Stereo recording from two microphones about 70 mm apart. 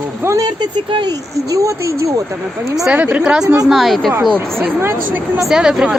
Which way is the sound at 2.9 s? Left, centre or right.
Right.